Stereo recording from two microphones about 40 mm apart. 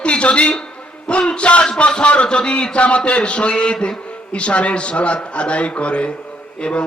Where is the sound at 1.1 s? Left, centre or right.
Left.